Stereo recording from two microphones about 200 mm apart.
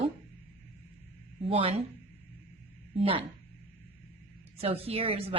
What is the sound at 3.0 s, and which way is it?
Speech, 25° right (ahead or behind).